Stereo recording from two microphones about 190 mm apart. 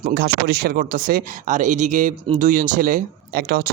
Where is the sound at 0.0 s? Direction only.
60° right (ahead or behind).